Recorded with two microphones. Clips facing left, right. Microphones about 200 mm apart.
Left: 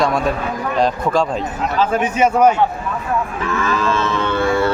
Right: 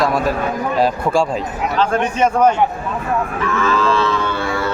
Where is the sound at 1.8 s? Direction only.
5° left (ahead or behind).